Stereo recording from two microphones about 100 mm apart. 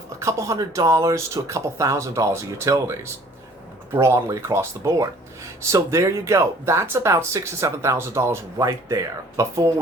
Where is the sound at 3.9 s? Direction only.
25° right (ahead or behind).